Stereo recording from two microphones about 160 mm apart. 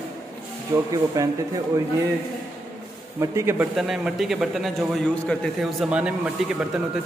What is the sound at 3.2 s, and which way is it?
Speech, 20° right (ahead or behind).